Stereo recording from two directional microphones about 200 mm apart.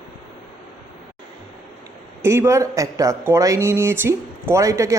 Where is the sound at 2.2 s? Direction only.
15° right (ahead or behind).